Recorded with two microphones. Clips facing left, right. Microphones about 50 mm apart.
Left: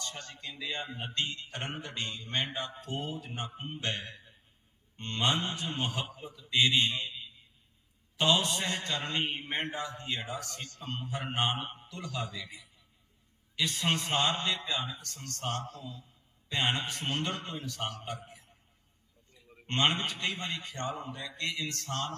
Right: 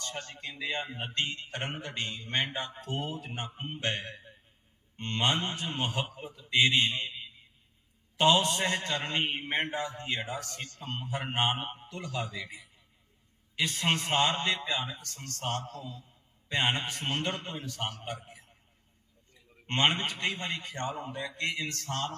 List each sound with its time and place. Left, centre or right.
0.0 s a man's voice: right
1.5 s a man's voice: right
6.5 s a man's voice: right
8.2 s a man's voice: right
14.7 s a man's voice: centre
14.9 s a man's voice: right
16.5 s a man's voice: right
16.7 s a man's voice: right
19.7 s a man's voice: right